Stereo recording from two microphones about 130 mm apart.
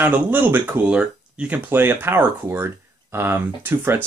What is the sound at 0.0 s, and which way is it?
Speech, 15° right (ahead or behind).